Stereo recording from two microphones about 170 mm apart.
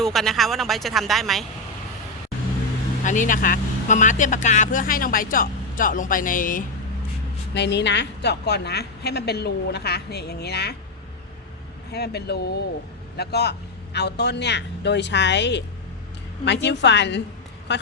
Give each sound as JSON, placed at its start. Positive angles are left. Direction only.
{"t": 0.0, "sound": "speech", "side_deg": 0}
{"t": 3.0, "sound": "speech", "side_deg": 50}
{"t": 7.5, "sound": "a woman's voice", "side_deg": 90}
{"t": 11.9, "sound": "a woman's voice", "side_deg": 70}